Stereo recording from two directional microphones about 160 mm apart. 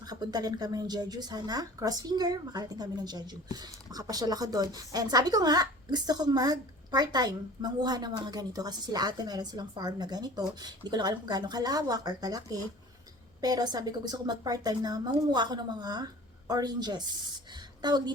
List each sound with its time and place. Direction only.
0.0 s a woman's voice: 25° right (ahead or behind)